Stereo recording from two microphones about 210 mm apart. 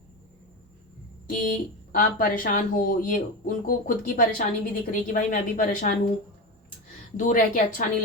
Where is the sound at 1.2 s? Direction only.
40° left (ahead or behind).